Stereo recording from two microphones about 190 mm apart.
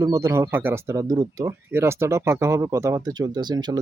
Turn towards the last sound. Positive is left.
turn(degrees=-20)  # may be behind; listen again after turning